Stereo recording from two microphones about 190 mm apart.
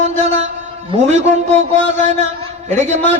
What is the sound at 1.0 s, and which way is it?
Speech, 35° right (ahead or behind).